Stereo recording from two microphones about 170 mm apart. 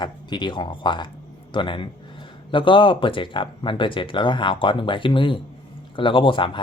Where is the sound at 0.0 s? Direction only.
25° left (ahead or behind).